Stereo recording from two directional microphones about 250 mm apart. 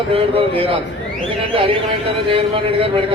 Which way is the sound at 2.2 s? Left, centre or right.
Right.